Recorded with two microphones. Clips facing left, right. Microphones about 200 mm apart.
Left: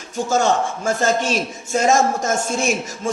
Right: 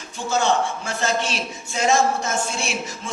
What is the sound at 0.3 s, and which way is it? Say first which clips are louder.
A man's voice: left 2 dB; 45° left (ahead or behind).